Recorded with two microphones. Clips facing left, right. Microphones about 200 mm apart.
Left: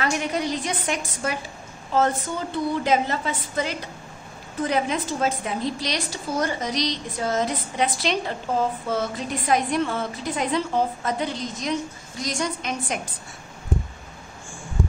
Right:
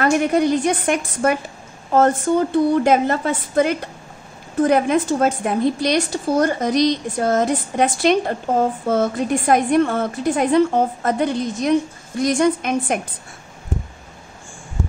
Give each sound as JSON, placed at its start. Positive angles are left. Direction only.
{"t": 0.0, "sound": "a woman's voice", "side_deg": -50}